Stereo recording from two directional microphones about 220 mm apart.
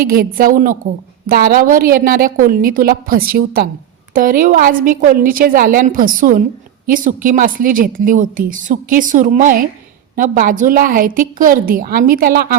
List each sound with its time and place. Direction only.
0.0 s a woman's voice: 40° right (ahead or behind)